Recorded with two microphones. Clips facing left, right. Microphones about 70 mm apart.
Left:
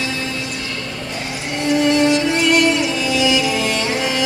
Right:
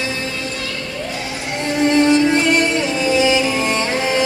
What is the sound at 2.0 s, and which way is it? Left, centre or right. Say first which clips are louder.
Music: right 2 dB; right.